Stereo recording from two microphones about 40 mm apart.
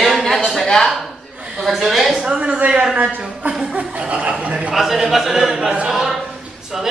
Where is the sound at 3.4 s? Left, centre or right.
Right.